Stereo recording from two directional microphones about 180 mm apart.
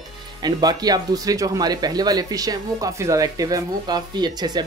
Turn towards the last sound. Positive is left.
turn(degrees=-25)  # may be behind; listen again after turning